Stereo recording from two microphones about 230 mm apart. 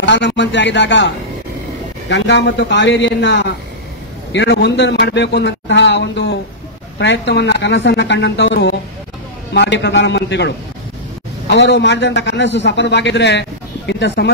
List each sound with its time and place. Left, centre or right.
0.0 s a man's voice: left